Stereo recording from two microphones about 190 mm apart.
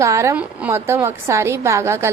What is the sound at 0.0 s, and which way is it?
A woman's voice, 15° right (ahead or behind).